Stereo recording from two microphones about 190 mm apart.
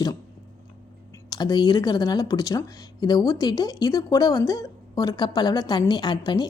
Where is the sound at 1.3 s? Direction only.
20° left (ahead or behind).